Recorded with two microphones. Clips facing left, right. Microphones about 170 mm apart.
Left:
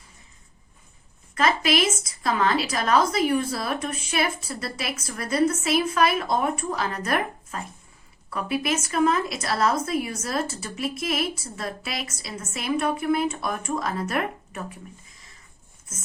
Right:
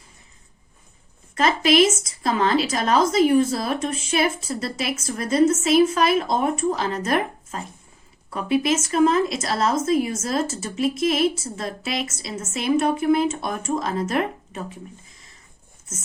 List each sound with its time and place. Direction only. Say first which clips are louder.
1.4 s a woman's voice: right 5 dB; 30° right (ahead or behind)